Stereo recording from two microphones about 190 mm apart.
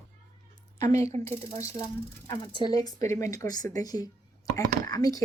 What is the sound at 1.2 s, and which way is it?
Speech, 15° left (ahead or behind).